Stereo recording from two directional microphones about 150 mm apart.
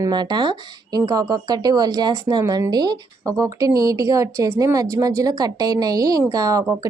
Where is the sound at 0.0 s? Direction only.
30° right (ahead or behind).